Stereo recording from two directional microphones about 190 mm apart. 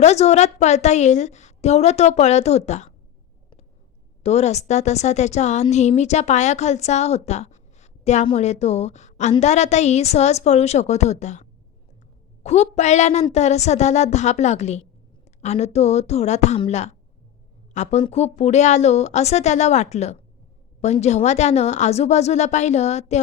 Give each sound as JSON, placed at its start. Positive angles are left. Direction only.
{"t": 0.0, "sound": "a woman's voice", "side_deg": 35}
{"t": 4.2, "sound": "a woman's voice", "side_deg": 35}